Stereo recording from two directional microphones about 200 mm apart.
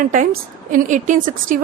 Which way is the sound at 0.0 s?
40° right (ahead or behind).